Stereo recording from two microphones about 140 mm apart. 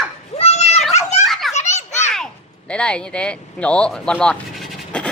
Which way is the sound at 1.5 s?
55° left (ahead or behind).